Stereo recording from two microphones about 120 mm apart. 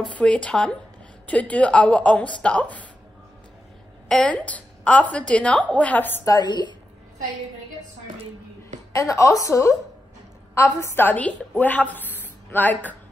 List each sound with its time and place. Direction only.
0.1 s a woman's voice: 10° left (ahead or behind)
4.1 s a woman's voice: 10° left (ahead or behind)
6.2 s a woman's voice: 35° left (ahead or behind)
8.9 s a woman's voice: 25° left (ahead or behind)
12.2 s a sound: 15° left (ahead or behind)